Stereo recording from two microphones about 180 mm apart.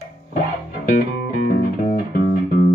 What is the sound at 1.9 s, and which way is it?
Music, 55° left (ahead or behind).